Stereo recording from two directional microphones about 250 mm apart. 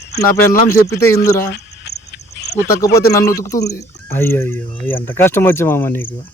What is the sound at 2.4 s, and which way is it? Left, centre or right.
Cricket, left.